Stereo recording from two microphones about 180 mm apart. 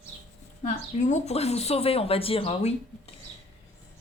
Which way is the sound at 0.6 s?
40° left (ahead or behind).